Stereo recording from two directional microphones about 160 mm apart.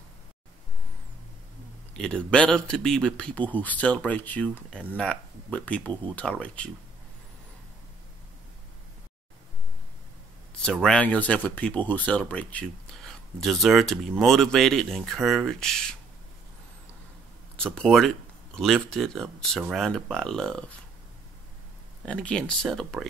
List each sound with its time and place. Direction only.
2.0 s speech: 5° left (ahead or behind)
10.6 s speech: 5° left (ahead or behind)
17.6 s speech: 5° left (ahead or behind)
22.0 s speech: 5° left (ahead or behind)